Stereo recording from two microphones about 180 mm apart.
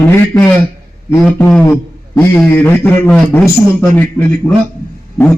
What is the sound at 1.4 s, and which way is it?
A man's voice, 10° left (ahead or behind).